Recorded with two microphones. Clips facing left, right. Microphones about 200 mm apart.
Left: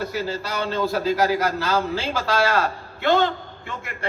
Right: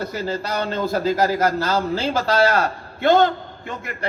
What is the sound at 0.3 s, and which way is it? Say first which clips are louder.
A man's voice: right 2 dB; 50° right (ahead or behind).